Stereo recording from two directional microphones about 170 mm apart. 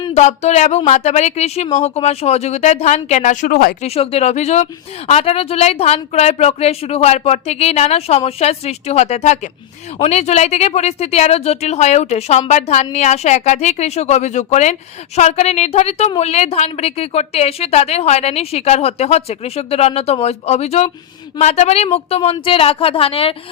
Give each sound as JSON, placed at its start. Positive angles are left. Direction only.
{"t": 0.1, "sound": "speech", "side_deg": 40}
{"t": 3.8, "sound": "speech", "side_deg": 35}